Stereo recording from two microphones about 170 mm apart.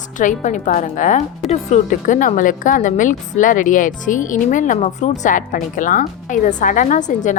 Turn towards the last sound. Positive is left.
turn(degrees=45)  # may be behind; listen again after turning